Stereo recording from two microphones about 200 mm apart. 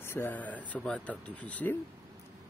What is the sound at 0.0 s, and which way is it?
Speech, 10° left (ahead or behind).